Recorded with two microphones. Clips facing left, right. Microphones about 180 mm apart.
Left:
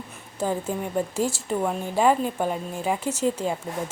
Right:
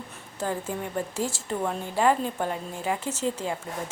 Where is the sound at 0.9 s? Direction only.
15° left (ahead or behind).